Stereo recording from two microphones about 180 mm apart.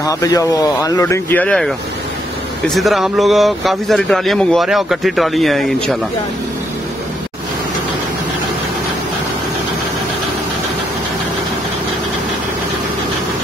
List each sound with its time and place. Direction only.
0.0 s speech: 20° left (ahead or behind); by 5.9 s centre (ahead or behind)